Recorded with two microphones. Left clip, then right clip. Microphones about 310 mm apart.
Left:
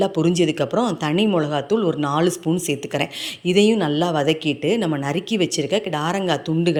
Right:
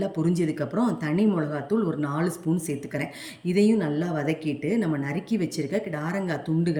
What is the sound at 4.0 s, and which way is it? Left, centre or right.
Speech, centre.